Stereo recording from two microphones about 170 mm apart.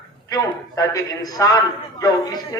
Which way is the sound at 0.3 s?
20° left (ahead or behind).